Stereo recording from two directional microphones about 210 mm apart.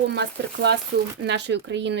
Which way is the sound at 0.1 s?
55° right (ahead or behind).